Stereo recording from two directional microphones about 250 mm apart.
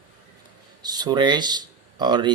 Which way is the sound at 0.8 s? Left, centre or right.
Centre.